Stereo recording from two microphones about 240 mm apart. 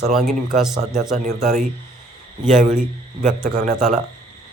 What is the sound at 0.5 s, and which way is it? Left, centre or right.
Speech, centre.